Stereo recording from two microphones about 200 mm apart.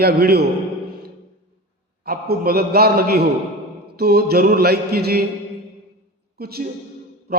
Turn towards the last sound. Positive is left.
turn(degrees=-50)  # may be behind; listen again after turning